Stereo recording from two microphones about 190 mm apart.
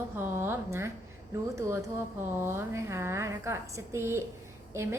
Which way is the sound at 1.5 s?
15° right (ahead or behind).